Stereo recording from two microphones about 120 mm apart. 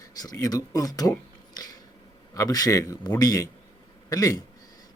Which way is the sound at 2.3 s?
30° left (ahead or behind).